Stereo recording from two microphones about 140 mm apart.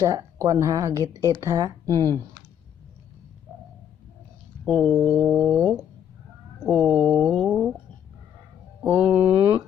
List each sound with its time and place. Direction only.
0.0 s speech: 25° right (ahead or behind)
4.8 s a sound: centre (ahead or behind)
8.8 s mantra: 10° right (ahead or behind)